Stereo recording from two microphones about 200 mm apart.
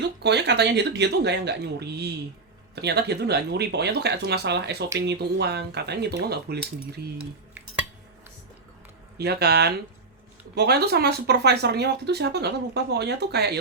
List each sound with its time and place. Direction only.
0.2 s speech: 60° right (ahead or behind)
9.1 s speech: 55° right (ahead or behind)